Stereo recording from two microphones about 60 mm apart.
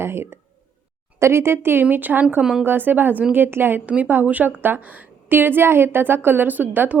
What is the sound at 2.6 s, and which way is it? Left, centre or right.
A woman's voice, right.